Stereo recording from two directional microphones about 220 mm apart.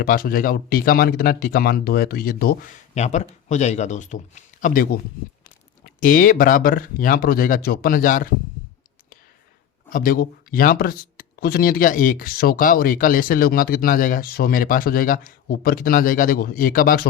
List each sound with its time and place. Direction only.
0.0 s speech: 40° left (ahead or behind)
9.9 s speech: 40° left (ahead or behind)